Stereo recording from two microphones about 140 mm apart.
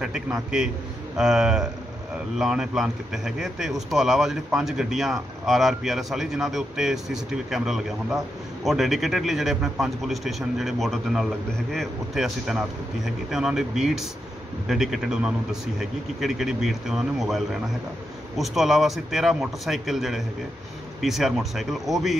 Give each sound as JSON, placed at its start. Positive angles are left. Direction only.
{"t": 0.0, "sound": "speech", "side_deg": -5}